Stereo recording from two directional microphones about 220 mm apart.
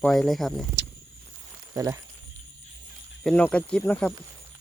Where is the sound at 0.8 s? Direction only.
50° right (ahead or behind).